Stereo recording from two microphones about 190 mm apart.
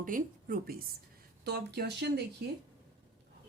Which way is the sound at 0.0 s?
45° right (ahead or behind).